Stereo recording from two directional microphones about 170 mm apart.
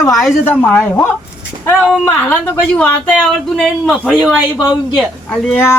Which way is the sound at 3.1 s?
Centre (ahead or behind).